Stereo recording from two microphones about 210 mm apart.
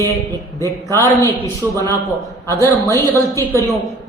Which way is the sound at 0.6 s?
15° left (ahead or behind).